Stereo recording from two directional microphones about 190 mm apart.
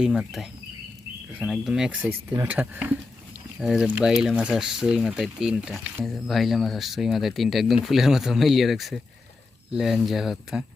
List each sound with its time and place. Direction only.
0.0 s speech: centre (ahead or behind)